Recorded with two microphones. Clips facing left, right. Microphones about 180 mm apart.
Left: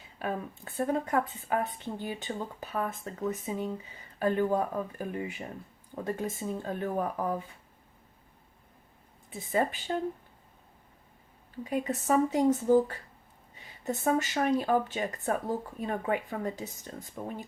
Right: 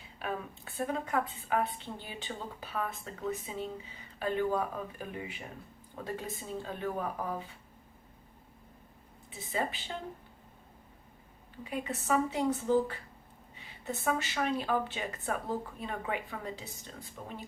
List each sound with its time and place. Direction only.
0.2 s a woman's voice: 40° left (ahead or behind)
9.5 s a woman's voice: 45° left (ahead or behind)
11.6 s a woman's voice: 40° left (ahead or behind)